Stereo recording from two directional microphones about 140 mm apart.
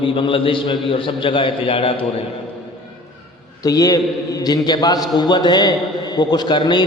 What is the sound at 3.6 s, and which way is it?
A man's voice, 25° left (ahead or behind).